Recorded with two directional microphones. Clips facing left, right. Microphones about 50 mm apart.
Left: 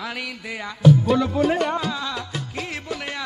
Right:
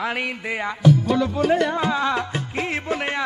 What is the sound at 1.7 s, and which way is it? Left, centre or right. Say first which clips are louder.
Music: right 5 dB; right.